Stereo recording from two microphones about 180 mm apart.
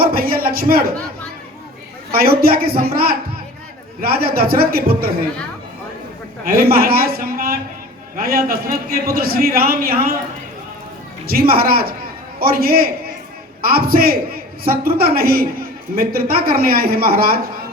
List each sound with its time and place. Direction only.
0.0 s a sound: 55° right (ahead or behind)
2.1 s a man's voice: 55° right (ahead or behind)
6.4 s a man's voice: 55° right (ahead or behind)
11.3 s a man's voice: 55° right (ahead or behind)